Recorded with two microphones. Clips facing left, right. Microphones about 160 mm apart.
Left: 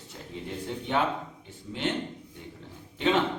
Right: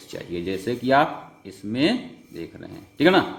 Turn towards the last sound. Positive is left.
turn(degrees=-70)  # may be behind; listen again after turning